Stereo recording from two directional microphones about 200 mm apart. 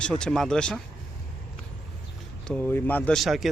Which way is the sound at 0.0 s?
5° left (ahead or behind).